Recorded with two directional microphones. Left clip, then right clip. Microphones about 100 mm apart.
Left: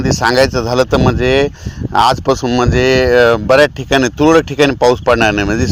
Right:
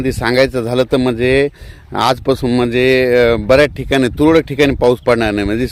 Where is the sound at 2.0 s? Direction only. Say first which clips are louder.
Left 3 dB; 35° right (ahead or behind).